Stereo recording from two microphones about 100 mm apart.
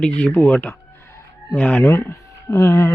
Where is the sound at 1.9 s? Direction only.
25° left (ahead or behind).